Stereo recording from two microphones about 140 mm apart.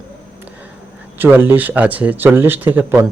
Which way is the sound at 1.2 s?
15° right (ahead or behind).